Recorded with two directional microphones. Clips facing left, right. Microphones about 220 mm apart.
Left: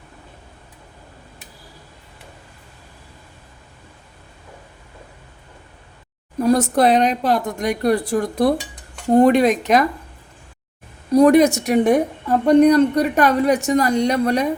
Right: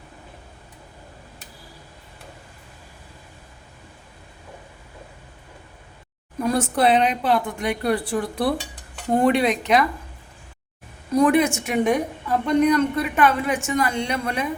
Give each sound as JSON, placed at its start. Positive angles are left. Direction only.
{"t": 6.4, "sound": "a woman's voice", "side_deg": 40}
{"t": 11.1, "sound": "a woman's voice", "side_deg": 40}